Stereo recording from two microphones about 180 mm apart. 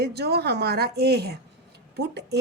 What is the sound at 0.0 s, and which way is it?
Speech, 65° right (ahead or behind).